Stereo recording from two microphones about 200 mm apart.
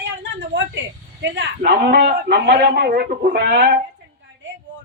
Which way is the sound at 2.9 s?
40° right (ahead or behind).